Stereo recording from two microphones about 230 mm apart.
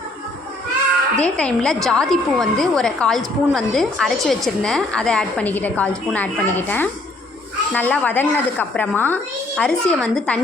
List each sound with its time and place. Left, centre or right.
1.2 s a woman's voice: centre